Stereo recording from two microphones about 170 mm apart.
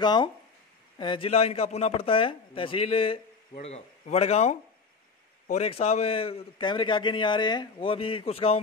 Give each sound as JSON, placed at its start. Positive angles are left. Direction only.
{"t": 0.0, "sound": "a man's voice", "side_deg": 25}